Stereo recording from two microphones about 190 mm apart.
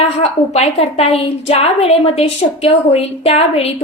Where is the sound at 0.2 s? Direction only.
35° left (ahead or behind).